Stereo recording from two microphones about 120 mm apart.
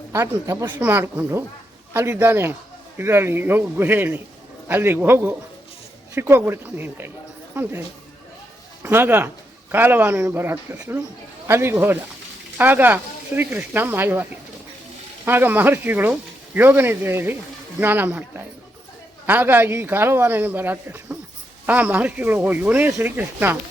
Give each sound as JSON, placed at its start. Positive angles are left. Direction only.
{"t": 0.1, "sound": "speech", "side_deg": -20}